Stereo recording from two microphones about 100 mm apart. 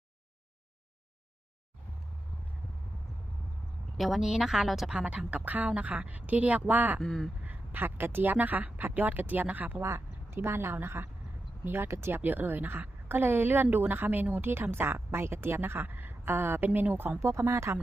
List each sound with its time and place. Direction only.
3.9 s a woman's voice: centre (ahead or behind)
7.0 s speech: 5° left (ahead or behind)
7.4 s a woman's voice: 20° right (ahead or behind)